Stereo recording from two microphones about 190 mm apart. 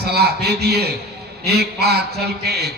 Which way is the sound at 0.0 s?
55° right (ahead or behind).